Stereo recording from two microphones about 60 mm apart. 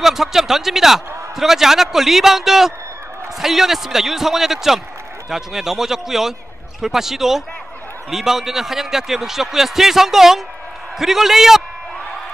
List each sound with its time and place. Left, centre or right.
0.0 s a man's voice: centre